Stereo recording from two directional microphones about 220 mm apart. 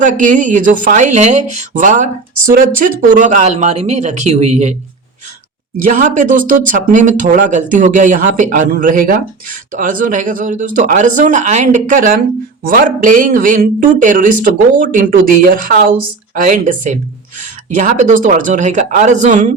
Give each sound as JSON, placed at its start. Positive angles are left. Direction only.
{"t": 0.0, "sound": "speech", "side_deg": -35}
{"t": 5.9, "sound": "speech", "side_deg": -35}